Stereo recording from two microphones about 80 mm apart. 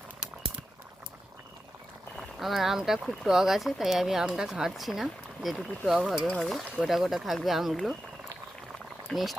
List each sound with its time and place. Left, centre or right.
2.1 s speech: centre
9.0 s speech: centre